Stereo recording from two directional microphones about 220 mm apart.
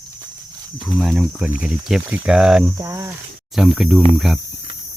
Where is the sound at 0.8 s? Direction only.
Centre (ahead or behind).